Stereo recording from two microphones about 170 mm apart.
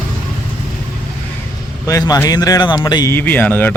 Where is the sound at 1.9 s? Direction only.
20° left (ahead or behind).